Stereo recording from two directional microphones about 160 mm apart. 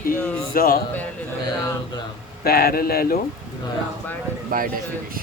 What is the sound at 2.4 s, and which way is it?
Speech, 75° left (ahead or behind).